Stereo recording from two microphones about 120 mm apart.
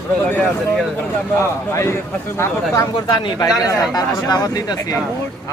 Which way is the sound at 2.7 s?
30° left (ahead or behind).